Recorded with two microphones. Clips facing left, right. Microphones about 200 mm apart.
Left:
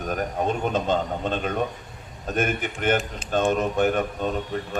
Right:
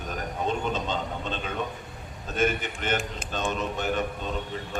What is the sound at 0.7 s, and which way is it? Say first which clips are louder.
Speech: left 6 dB; 50° left (ahead or behind).